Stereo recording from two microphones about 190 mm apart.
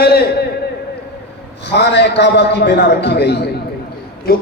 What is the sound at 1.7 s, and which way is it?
A man's voice, 65° left (ahead or behind).